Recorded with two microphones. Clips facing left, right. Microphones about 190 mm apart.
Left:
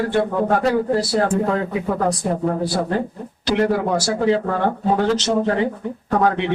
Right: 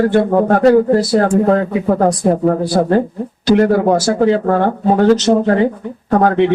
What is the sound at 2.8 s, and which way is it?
Speech, 55° right (ahead or behind).